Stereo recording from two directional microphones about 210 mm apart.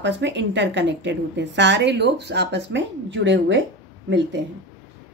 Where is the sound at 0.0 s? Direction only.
60° right (ahead or behind).